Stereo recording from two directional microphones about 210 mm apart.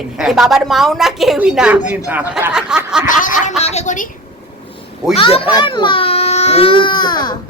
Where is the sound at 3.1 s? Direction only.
40° left (ahead or behind).